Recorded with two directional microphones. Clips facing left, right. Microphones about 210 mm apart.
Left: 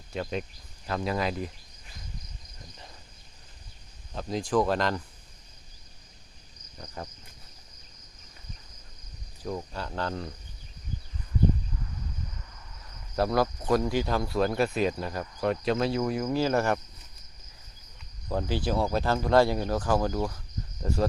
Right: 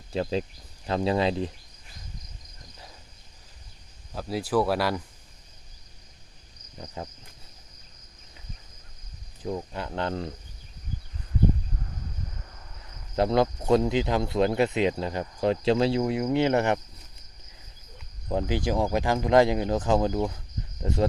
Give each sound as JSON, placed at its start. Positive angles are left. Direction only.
{"t": 0.1, "sound": "speech", "side_deg": -30}
{"t": 4.1, "sound": "speech", "side_deg": -5}
{"t": 9.4, "sound": "speech", "side_deg": -20}
{"t": 13.1, "sound": "speech", "side_deg": -20}
{"t": 18.3, "sound": "speech", "side_deg": -15}